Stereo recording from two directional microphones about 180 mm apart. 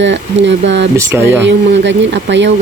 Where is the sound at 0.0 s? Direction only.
85° right.